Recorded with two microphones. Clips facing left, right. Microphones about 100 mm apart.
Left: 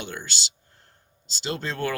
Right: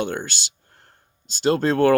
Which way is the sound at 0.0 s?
50° right (ahead or behind).